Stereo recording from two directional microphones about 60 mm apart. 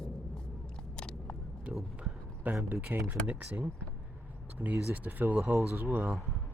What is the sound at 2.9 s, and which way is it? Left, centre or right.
Speech, right.